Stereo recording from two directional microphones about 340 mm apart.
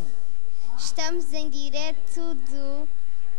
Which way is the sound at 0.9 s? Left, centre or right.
Right.